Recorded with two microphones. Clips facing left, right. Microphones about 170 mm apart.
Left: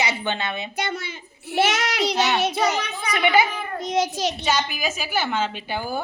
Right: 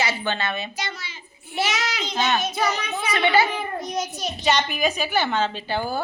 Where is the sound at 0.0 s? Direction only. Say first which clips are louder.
Even; 15° left (ahead or behind).